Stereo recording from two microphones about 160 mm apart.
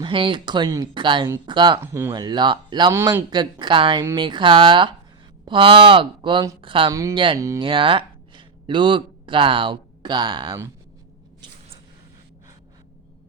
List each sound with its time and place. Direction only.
0.0 s speech: 30° right (ahead or behind)
1.8 s speech: 15° right (ahead or behind)
2.1 s speech: 25° right (ahead or behind)
2.9 s speech: 15° right (ahead or behind)
3.2 s speech: 30° right (ahead or behind)
7.3 s speech: 20° right (ahead or behind)
7.6 s speech: 35° right (ahead or behind)